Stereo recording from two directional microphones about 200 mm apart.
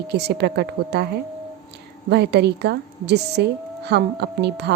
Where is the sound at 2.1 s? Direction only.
55° right (ahead or behind).